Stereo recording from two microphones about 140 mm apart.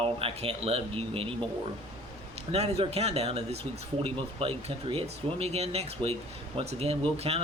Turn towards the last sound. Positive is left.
turn(degrees=-40)  # may be behind; listen again after turning